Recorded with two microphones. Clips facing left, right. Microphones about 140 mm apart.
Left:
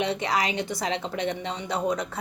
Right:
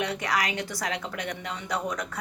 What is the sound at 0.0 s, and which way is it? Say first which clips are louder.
A woman's voice: left 3 dB; 25° left (ahead or behind).